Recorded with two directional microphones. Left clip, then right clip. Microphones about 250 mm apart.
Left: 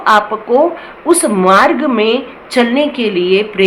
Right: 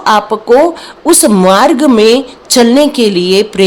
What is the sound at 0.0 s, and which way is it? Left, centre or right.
A woman's voice, right.